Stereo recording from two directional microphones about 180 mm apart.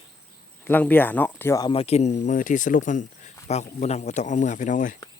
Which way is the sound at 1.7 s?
35° left (ahead or behind).